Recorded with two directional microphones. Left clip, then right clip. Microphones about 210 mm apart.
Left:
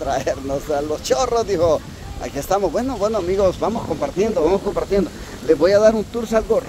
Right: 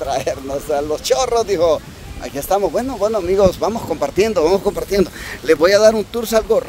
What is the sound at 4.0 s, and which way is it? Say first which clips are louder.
Speech: right 4 dB; 40° right (ahead or behind).